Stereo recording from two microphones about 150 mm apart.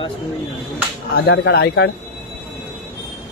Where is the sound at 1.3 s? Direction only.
90° left.